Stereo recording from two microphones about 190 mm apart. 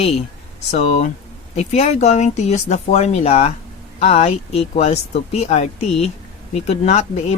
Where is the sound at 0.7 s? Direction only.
35° left (ahead or behind).